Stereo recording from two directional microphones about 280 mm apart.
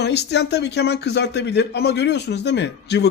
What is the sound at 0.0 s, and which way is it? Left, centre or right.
A man's voice, left.